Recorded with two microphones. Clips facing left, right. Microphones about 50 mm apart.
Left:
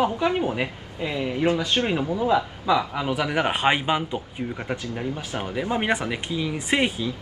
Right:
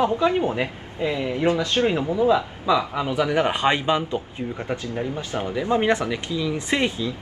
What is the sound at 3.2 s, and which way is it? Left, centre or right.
Speech, centre.